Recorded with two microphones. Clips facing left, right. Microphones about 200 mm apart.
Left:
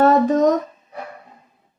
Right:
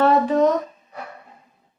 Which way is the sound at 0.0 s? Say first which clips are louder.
Left 2 dB; 40° left (ahead or behind).